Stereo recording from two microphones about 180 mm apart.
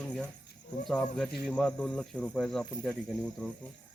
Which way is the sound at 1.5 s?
5° left (ahead or behind).